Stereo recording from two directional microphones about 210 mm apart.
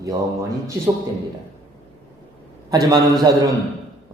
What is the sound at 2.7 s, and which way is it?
Speech, 15° right (ahead or behind).